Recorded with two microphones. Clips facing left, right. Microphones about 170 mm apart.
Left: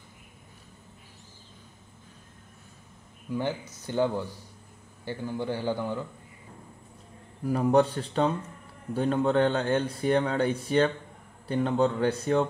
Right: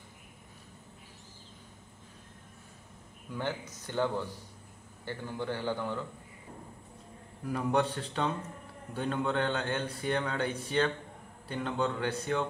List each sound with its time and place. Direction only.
3.3 s speech: 10° left (ahead or behind)
7.4 s a man's voice: 35° left (ahead or behind)